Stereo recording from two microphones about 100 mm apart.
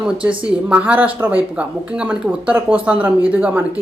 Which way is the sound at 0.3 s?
10° right (ahead or behind).